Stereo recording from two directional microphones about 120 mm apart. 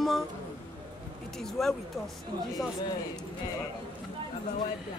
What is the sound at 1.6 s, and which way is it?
Speech, centre (ahead or behind).